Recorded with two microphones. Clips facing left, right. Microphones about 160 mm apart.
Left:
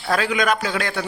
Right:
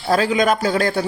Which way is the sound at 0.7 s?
40° right (ahead or behind).